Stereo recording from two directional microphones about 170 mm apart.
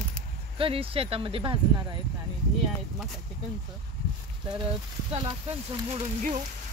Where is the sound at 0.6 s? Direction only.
35° right (ahead or behind).